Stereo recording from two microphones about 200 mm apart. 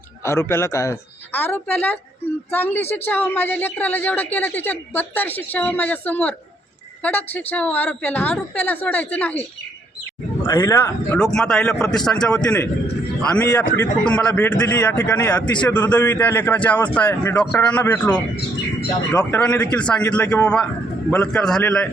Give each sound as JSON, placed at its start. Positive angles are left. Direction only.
{"t": 0.2, "sound": "a woman's voice", "side_deg": 15}
{"t": 10.4, "sound": "a woman's voice", "side_deg": 15}